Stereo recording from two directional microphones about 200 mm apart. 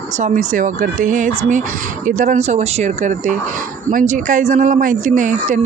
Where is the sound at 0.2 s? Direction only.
35° right (ahead or behind).